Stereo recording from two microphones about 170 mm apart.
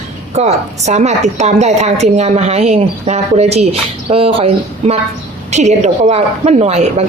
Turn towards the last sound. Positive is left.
turn(degrees=-40)  # may be behind; listen again after turning